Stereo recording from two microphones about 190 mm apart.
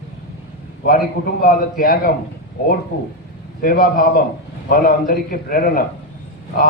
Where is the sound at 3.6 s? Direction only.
50° left (ahead or behind).